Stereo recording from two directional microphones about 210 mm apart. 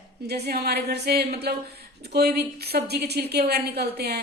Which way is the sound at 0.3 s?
50° right (ahead or behind).